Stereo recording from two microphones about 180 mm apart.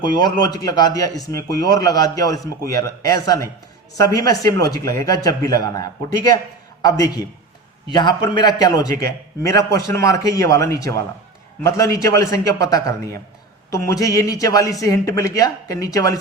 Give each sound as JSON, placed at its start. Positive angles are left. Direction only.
{"t": 0.0, "sound": "a man's voice", "side_deg": 25}